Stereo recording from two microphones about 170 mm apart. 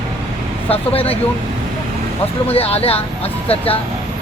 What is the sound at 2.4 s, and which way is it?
Speech, 35° left (ahead or behind).